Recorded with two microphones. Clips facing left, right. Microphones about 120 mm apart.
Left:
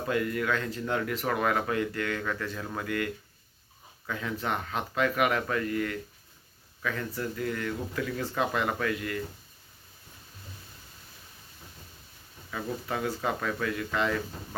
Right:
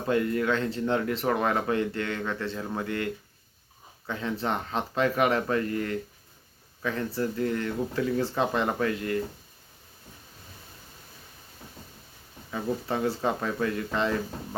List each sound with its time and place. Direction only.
0.1 s speech: 30° right (ahead or behind)
12.5 s speech: 25° right (ahead or behind)